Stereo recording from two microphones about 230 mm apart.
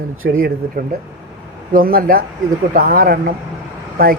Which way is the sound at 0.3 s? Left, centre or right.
Right.